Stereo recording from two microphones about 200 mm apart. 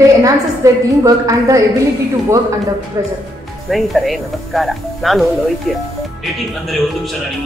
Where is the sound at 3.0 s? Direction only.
15° right (ahead or behind).